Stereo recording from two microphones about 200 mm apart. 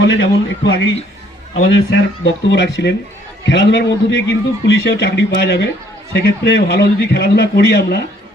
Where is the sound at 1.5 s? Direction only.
80° left.